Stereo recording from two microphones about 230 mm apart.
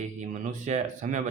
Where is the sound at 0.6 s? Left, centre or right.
Right.